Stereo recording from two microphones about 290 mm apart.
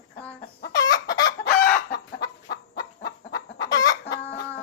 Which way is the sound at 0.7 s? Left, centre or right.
Centre.